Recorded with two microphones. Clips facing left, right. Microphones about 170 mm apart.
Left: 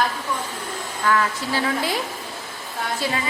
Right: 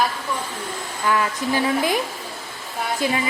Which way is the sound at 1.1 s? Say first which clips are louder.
Right 1 dB; 15° right (ahead or behind).